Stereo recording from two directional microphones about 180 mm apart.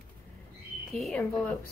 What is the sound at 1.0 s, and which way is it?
Speech, centre (ahead or behind).